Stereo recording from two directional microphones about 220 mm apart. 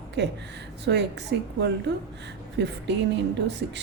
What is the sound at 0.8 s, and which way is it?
A woman's voice, 50° right (ahead or behind).